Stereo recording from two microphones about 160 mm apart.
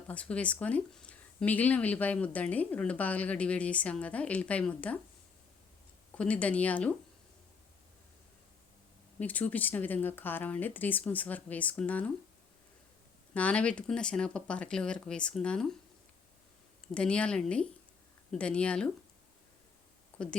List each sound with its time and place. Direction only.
0.1 s speech: 10° left (ahead or behind)
6.1 s speech: 10° left (ahead or behind)
9.1 s speech: 10° left (ahead or behind)
13.3 s speech: 10° left (ahead or behind)
16.9 s speech: 5° left (ahead or behind)
20.1 s a sound: 10° left (ahead or behind)